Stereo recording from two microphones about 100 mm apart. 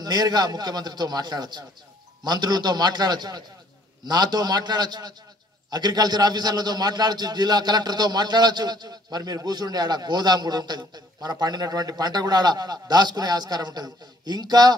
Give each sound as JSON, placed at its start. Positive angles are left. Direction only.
{"t": 0.0, "sound": "a man's voice", "side_deg": -40}